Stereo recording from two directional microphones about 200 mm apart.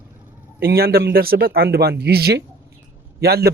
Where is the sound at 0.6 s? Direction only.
50° right (ahead or behind).